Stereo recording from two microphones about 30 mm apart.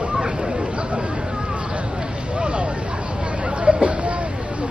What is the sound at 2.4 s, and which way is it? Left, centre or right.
Vehicle, right.